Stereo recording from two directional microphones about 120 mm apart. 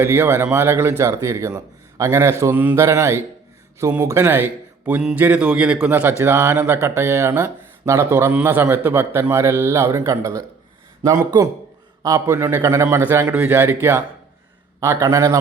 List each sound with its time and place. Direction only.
0.0 s speech: 20° right (ahead or behind)